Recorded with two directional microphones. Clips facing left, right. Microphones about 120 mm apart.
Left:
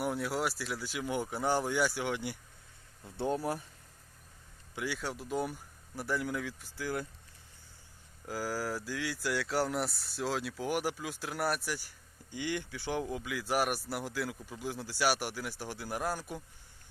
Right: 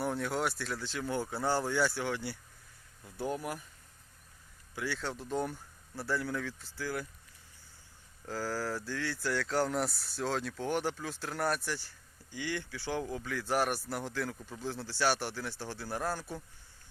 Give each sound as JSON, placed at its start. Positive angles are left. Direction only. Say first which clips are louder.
{"t": 0.0, "sound": "speech", "louder": "even", "side_deg": 10}
{"t": 4.7, "sound": "speech", "louder": "even", "side_deg": 15}
{"t": 8.3, "sound": "speech", "louder": "even", "side_deg": 10}